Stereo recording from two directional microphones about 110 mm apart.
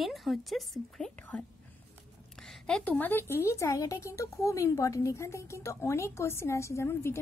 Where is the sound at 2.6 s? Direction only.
10° left (ahead or behind).